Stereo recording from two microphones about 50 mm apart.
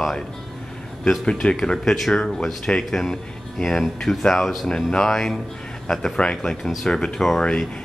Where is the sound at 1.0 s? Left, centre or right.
Centre.